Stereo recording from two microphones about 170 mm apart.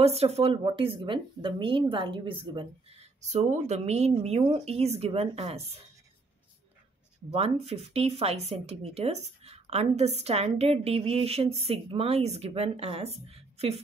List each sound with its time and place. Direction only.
0.0 s speech: 35° right (ahead or behind)
7.6 s speech: 35° right (ahead or behind)